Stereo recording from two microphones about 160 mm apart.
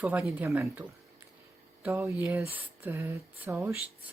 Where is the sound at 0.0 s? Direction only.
10° right (ahead or behind).